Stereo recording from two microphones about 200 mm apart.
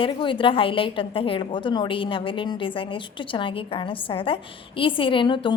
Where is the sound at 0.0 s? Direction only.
25° left (ahead or behind).